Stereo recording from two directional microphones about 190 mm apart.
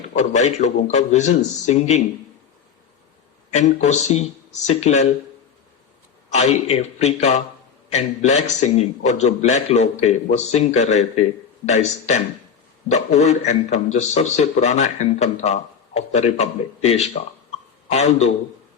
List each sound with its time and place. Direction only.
0.1 s a man's voice: 40° left (ahead or behind)
3.5 s a man's voice: 40° left (ahead or behind)
6.3 s a man's voice: 35° left (ahead or behind)